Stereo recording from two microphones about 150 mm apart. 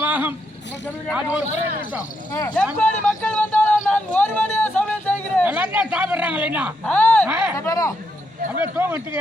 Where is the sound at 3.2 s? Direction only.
5° left (ahead or behind).